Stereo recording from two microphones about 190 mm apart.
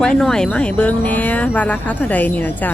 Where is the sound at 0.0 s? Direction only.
5° left (ahead or behind).